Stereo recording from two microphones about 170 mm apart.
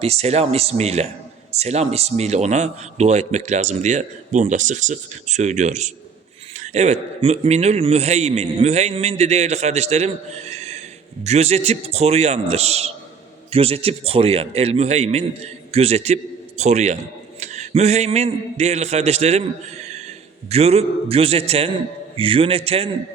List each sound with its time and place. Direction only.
0.0 s a man's voice: 40° right (ahead or behind)